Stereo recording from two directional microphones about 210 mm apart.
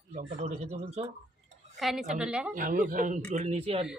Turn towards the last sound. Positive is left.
turn(degrees=-30)  # may be behind; listen again after turning